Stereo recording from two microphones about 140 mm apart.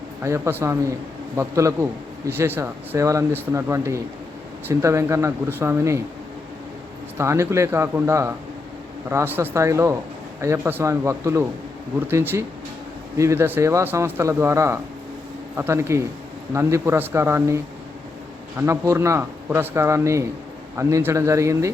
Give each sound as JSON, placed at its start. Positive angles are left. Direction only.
{"t": 0.2, "sound": "a man's voice", "side_deg": -20}
{"t": 7.2, "sound": "a man's voice", "side_deg": -20}